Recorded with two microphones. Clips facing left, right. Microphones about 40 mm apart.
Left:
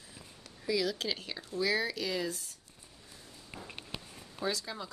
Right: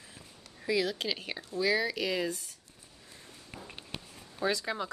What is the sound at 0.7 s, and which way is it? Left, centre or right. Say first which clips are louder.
Speech: right 2 dB; right.